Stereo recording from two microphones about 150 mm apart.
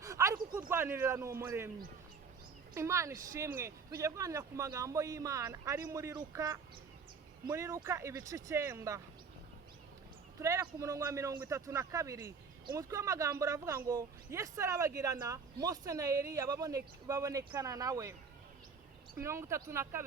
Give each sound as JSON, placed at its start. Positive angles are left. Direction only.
{"t": 0.0, "sound": "a sound", "side_deg": -20}
{"t": 0.7, "sound": "a man's voice", "side_deg": -15}
{"t": 2.7, "sound": "a man's voice", "side_deg": -20}
{"t": 10.4, "sound": "a man's voice", "side_deg": -20}
{"t": 19.2, "sound": "a man's voice", "side_deg": -20}